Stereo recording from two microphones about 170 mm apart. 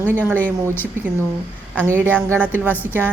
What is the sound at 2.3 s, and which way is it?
Speech, 10° right (ahead or behind).